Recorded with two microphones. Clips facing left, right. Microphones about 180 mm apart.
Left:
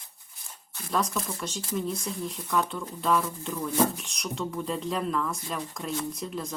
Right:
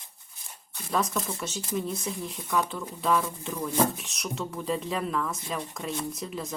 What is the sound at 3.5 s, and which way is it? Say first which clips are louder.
Speech: even; 15° right (ahead or behind).